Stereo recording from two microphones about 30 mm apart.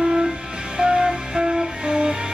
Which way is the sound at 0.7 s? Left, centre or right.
Right.